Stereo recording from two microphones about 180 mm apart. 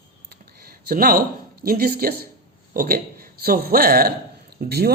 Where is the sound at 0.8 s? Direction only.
55° right (ahead or behind).